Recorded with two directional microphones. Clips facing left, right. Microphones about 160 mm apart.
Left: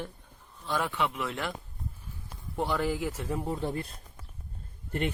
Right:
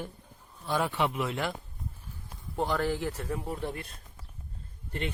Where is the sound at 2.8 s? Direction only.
5° left (ahead or behind).